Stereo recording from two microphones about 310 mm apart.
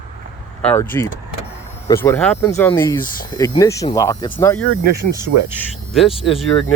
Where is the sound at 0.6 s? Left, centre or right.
Centre.